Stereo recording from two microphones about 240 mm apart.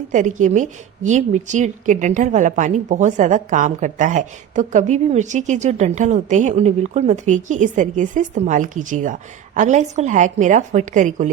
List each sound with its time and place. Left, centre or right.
0.1 s a woman's voice: right